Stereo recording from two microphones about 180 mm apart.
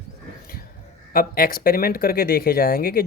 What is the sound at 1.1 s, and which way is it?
Speech, 55° left (ahead or behind).